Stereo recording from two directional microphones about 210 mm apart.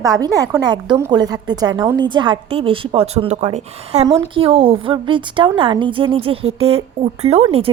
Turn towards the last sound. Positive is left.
turn(degrees=-30)  # may be behind; listen again after turning